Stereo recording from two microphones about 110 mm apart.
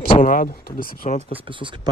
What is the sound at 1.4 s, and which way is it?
Speech, 50° right (ahead or behind).